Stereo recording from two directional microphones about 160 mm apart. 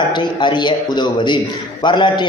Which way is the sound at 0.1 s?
30° left (ahead or behind).